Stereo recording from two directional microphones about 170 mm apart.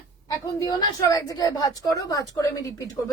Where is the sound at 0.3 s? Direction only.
20° left (ahead or behind).